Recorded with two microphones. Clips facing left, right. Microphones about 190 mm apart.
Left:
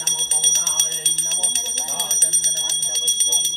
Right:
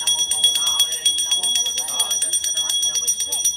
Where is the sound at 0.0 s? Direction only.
45° left (ahead or behind).